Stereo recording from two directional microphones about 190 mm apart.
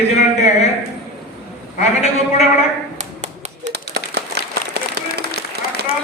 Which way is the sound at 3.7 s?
60° right (ahead or behind).